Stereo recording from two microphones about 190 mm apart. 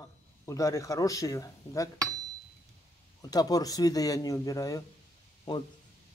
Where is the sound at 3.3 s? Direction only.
20° left (ahead or behind).